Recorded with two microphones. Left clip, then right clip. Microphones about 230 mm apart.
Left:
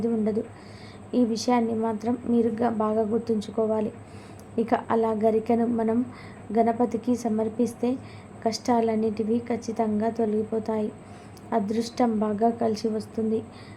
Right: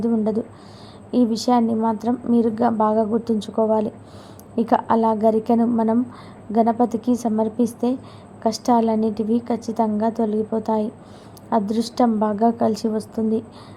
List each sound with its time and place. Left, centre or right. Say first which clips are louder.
0.0 s a woman's voice: right 4 dB; right